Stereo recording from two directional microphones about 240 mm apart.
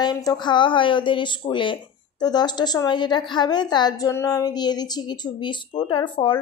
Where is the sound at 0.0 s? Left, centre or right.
Centre.